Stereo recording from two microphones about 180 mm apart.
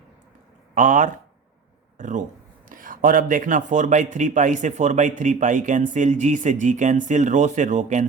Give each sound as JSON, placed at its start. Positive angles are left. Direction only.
{"t": 0.7, "sound": "speech", "side_deg": -45}